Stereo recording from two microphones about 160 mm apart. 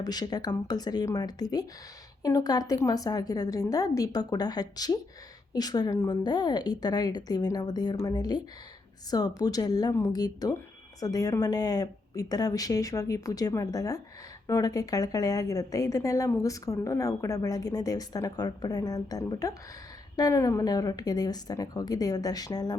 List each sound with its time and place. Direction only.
0.0 s a woman's voice: 25° left (ahead or behind)